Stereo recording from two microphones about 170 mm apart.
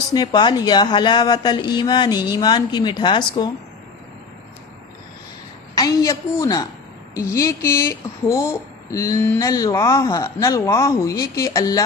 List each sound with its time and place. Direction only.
0.1 s speech: 25° left (ahead or behind)
5.7 s a woman's voice: 20° left (ahead or behind)